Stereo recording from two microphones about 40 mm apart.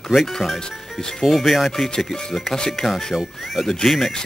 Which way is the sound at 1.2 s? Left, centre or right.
Centre.